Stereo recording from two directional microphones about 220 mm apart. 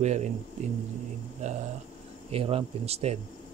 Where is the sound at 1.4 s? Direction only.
30° right (ahead or behind).